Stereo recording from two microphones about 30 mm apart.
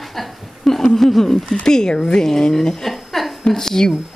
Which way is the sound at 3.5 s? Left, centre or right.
Centre.